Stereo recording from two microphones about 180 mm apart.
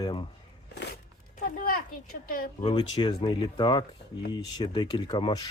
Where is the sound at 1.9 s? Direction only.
50° left (ahead or behind).